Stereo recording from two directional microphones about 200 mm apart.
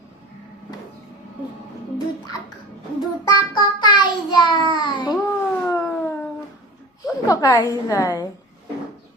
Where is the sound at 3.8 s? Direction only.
20° left (ahead or behind).